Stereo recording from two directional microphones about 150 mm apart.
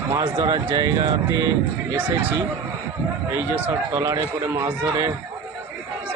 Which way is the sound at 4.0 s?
25° right (ahead or behind).